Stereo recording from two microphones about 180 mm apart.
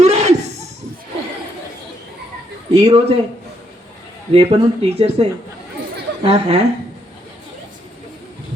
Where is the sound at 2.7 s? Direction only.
35° right (ahead or behind).